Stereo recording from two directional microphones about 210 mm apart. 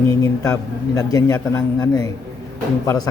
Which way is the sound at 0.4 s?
15° left (ahead or behind).